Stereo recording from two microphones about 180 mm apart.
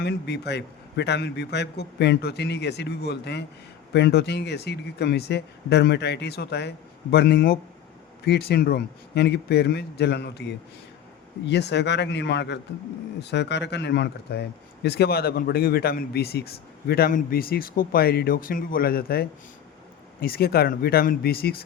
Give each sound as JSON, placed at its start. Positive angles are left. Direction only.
{"t": 0.0, "sound": "a man's voice", "side_deg": 70}